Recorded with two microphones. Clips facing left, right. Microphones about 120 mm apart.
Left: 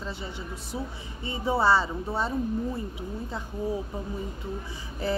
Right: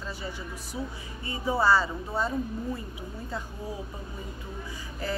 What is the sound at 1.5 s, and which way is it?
Speech, 25° left (ahead or behind).